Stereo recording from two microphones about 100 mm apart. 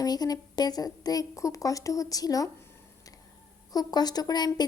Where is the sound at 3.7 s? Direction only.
40° left (ahead or behind).